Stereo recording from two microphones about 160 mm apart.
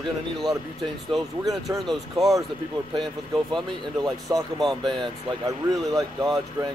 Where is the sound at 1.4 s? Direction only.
20° right (ahead or behind).